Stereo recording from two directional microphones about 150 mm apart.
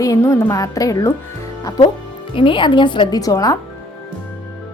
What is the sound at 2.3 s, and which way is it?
Speech, 35° left (ahead or behind).